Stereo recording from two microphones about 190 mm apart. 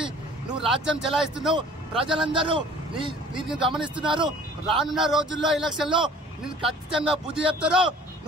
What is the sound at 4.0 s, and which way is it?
Speech, 25° right (ahead or behind).